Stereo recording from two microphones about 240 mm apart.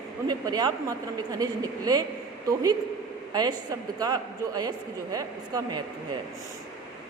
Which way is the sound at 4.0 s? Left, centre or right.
Centre.